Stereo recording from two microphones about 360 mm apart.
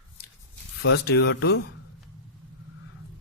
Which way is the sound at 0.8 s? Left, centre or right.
Left.